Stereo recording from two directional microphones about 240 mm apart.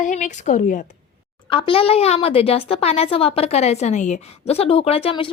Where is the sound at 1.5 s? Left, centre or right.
Left.